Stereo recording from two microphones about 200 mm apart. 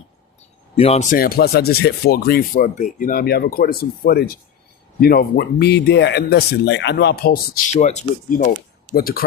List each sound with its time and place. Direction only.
0.8 s speech: 30° left (ahead or behind)
1.1 s speech: 45° left (ahead or behind)
7.7 s speech: 35° left (ahead or behind)